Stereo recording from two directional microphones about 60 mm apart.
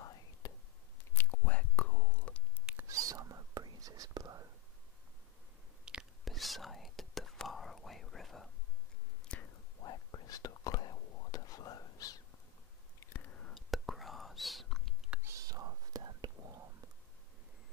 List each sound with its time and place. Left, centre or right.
0.0 s whispering: left
1.1 s whispering: left
2.9 s whispering: right
5.9 s whispering: centre
6.2 s whispering: centre
9.3 s whispering: centre
9.8 s whispering: left
13.5 s whispering: centre
15.2 s whispering: right